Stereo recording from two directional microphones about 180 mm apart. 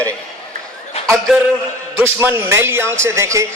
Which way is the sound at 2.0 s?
15° right (ahead or behind).